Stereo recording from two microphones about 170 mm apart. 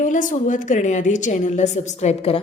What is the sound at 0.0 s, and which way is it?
A woman's voice, 50° left (ahead or behind).